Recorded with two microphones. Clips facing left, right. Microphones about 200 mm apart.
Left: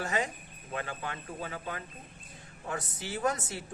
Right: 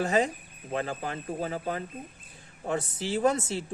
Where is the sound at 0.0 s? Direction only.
30° right (ahead or behind).